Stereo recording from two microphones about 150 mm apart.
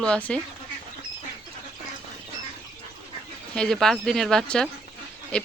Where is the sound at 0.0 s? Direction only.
5° left (ahead or behind).